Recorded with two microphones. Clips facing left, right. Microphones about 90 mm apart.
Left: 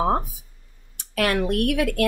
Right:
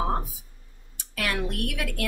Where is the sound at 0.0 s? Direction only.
55° left (ahead or behind).